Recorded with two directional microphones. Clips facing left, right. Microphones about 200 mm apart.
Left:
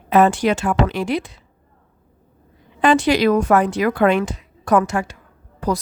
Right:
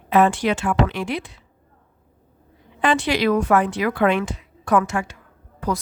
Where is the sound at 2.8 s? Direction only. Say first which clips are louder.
Left 4 dB; 40° left (ahead or behind).